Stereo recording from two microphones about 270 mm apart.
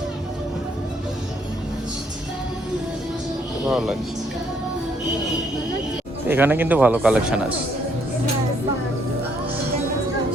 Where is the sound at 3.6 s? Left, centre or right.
Centre.